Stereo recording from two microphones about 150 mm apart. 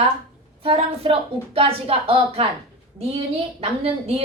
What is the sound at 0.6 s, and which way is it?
A woman's voice, 40° right (ahead or behind).